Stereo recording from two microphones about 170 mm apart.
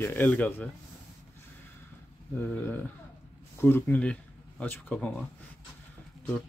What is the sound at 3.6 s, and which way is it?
Speech, 15° left (ahead or behind).